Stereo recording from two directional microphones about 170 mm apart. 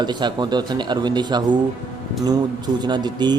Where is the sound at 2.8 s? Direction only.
25° right (ahead or behind).